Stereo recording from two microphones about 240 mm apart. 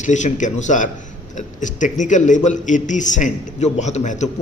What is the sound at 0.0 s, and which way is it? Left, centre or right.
Speech, left.